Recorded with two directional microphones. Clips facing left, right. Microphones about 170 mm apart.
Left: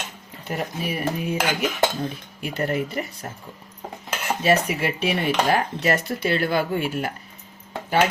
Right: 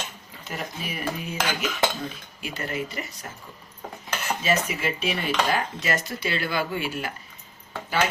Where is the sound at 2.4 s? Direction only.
55° left (ahead or behind).